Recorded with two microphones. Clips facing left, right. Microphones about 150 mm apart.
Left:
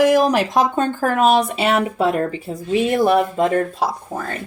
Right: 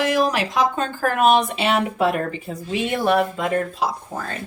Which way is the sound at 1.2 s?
35° left (ahead or behind).